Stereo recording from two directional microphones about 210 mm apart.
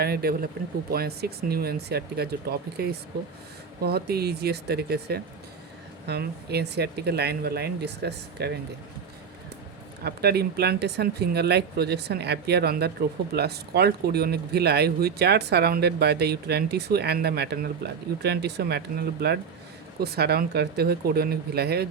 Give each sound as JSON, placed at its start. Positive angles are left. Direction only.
{"t": 0.0, "sound": "speech", "side_deg": -50}
{"t": 10.0, "sound": "speech", "side_deg": -50}
{"t": 20.0, "sound": "speech", "side_deg": -50}